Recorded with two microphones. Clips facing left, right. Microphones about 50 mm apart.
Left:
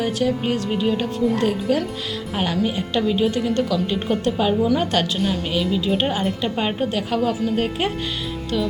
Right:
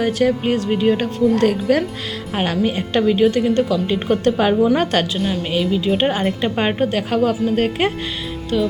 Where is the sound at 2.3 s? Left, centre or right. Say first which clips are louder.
Right 3 dB; right.